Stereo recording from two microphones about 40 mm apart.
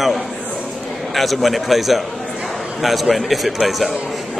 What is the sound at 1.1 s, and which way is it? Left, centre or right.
A man's voice, centre.